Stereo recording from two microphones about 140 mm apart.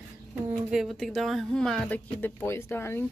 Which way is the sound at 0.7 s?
5° right (ahead or behind).